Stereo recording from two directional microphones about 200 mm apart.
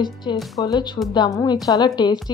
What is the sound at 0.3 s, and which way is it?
A woman's voice, 25° left (ahead or behind).